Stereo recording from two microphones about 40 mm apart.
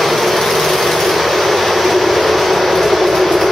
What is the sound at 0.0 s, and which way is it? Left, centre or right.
Vehicle, centre.